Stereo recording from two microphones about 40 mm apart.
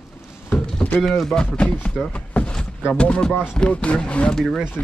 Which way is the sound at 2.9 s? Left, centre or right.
Left.